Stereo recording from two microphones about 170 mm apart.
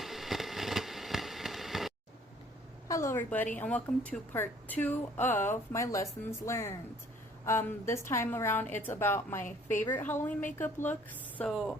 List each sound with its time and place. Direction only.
0.0 s fireworks: centre (ahead or behind)
2.8 s a woman's voice: 20° left (ahead or behind)
11.3 s speech: centre (ahead or behind)